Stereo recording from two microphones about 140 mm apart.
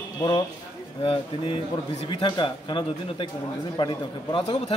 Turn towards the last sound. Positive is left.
turn(degrees=35)  # may be behind; listen again after turning